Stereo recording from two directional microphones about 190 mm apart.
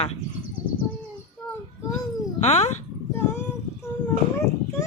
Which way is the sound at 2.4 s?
35° left (ahead or behind).